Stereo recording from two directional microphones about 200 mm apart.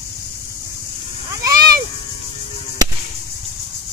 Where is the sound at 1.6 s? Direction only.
50° right (ahead or behind).